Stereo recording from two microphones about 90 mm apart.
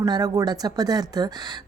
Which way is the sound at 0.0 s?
45° right (ahead or behind).